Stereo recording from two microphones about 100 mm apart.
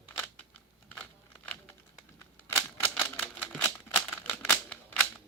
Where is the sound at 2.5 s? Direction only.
20° left (ahead or behind).